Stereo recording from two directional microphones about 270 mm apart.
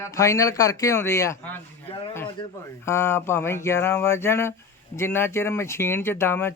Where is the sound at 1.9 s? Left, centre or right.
Left.